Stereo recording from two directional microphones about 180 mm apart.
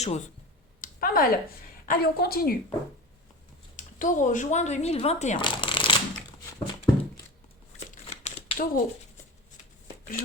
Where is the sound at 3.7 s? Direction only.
45° left (ahead or behind).